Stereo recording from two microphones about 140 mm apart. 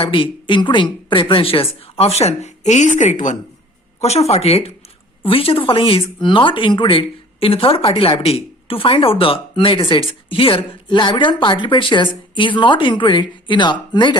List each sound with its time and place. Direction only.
0.0 s a woman's voice: 40° left (ahead or behind); by 3.3 s 60° left (ahead or behind)
4.0 s a woman's voice: 50° left (ahead or behind); by 14.2 s 30° left (ahead or behind)